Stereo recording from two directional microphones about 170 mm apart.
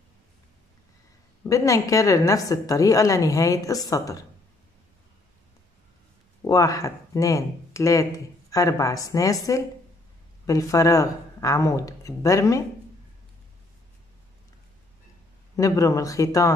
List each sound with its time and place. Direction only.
1.4 s speech: 20° left (ahead or behind)
6.4 s speech: 20° left (ahead or behind)
15.5 s speech: 20° left (ahead or behind)